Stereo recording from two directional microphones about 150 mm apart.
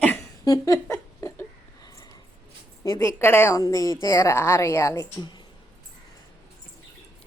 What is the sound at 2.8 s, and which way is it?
A woman's voice, 20° left (ahead or behind).